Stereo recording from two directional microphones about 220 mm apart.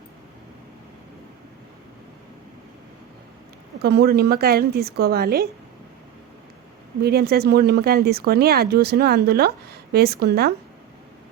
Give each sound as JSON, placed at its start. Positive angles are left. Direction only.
{"t": 3.8, "sound": "speech", "side_deg": -45}
{"t": 7.0, "sound": "speech", "side_deg": -45}